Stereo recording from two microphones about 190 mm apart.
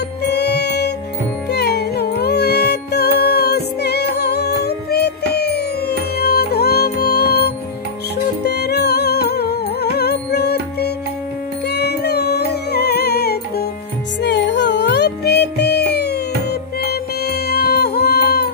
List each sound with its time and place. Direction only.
0.2 s music: 60° left (ahead or behind)